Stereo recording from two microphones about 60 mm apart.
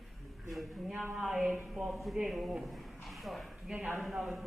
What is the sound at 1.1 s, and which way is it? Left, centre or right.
A woman's voice, centre.